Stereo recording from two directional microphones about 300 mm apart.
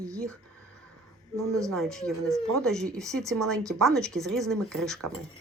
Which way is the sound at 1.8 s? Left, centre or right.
Centre.